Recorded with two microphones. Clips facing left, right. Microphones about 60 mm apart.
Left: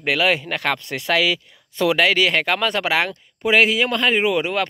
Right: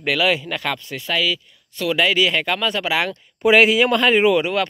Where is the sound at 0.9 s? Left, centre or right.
Left.